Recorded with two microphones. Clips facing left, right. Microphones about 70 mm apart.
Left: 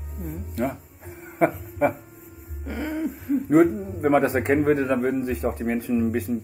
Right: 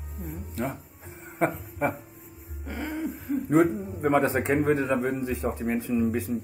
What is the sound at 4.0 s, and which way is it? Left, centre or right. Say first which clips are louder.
Speech: left 3 dB; centre.